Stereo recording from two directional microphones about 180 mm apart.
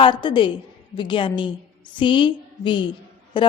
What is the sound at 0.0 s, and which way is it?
A woman's voice, 25° left (ahead or behind).